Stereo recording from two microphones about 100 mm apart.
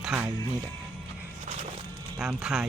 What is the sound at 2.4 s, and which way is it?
Speech, 5° right (ahead or behind).